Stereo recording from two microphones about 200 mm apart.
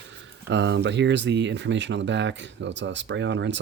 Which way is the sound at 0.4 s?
60° right (ahead or behind).